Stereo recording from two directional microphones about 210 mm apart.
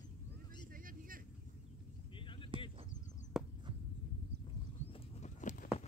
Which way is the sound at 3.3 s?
5° right (ahead or behind).